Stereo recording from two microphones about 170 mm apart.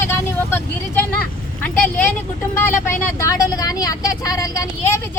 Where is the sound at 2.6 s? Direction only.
15° left (ahead or behind).